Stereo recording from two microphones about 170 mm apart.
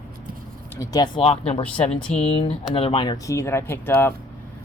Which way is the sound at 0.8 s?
25° left (ahead or behind).